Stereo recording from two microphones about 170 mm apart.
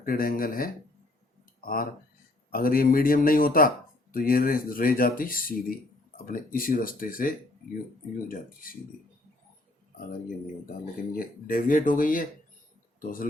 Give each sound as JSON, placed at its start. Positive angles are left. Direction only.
{"t": 0.0, "sound": "speech", "side_deg": 55}
{"t": 11.1, "sound": "speech", "side_deg": 55}